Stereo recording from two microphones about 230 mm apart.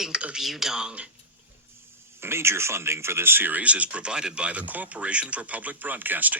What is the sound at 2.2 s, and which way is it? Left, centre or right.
Speech, centre.